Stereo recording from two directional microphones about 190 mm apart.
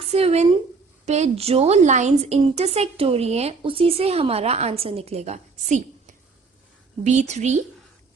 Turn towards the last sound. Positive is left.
turn(degrees=-35)  # may be behind; listen again after turning